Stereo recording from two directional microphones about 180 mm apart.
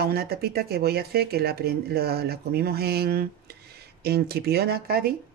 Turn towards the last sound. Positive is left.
turn(degrees=-60)  # may be behind; listen again after turning